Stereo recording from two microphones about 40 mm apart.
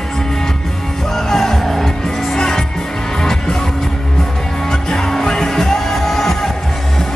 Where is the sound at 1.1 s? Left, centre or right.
Centre.